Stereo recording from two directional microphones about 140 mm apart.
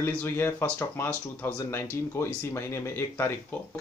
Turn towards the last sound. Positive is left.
turn(degrees=20)  # may be behind; listen again after turning